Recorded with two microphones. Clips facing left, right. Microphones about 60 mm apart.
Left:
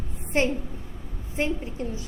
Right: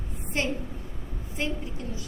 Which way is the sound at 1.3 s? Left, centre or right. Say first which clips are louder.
Left 4 dB; left.